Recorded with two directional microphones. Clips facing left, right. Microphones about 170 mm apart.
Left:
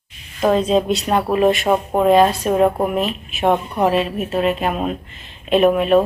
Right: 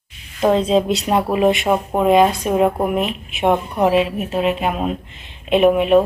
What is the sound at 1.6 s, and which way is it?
Speech, 5° right (ahead or behind).